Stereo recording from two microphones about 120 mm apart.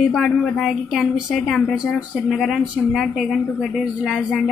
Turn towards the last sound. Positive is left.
turn(degrees=-5)  # may be behind; listen again after turning